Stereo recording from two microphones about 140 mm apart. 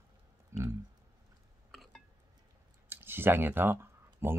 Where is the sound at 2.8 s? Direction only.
15° right (ahead or behind).